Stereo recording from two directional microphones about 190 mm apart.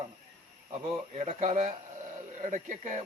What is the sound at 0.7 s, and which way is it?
A man's voice, 35° right (ahead or behind).